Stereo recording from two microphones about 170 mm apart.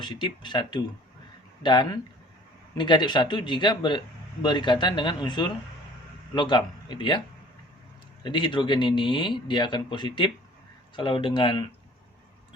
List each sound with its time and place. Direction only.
0.0 s speech: 25° left (ahead or behind)
8.2 s speech: 30° left (ahead or behind)